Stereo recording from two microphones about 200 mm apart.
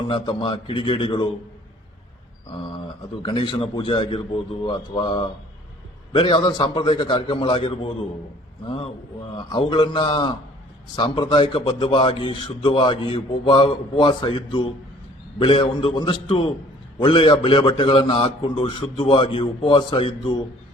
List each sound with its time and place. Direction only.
0.1 s a man's voice: 25° left (ahead or behind)
3.2 s a man's voice: 25° left (ahead or behind)